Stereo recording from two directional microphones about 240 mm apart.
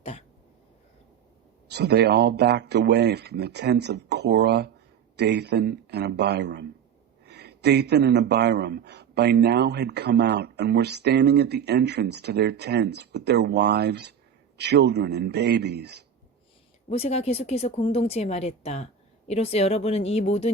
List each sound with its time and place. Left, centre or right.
0.0 s a sound: left
1.6 s speech: right
16.9 s speech: left